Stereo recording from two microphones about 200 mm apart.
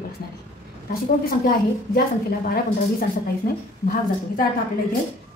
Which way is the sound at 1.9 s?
50° left (ahead or behind).